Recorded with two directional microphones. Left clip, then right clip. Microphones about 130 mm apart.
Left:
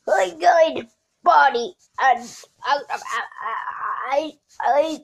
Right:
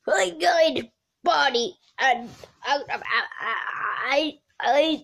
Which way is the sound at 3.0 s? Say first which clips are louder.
Right 1 dB; 55° right (ahead or behind).